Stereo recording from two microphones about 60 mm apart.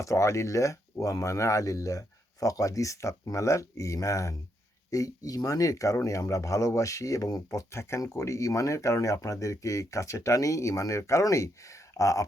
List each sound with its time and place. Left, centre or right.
0.0 s speech: left
4.9 s speech: left
7.7 s speech: left